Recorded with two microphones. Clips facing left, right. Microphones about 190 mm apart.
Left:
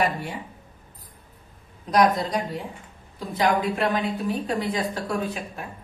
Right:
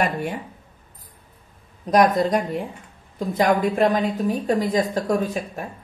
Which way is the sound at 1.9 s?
50° right (ahead or behind).